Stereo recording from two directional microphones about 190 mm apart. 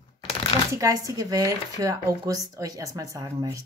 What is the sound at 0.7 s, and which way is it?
Speech, 20° right (ahead or behind).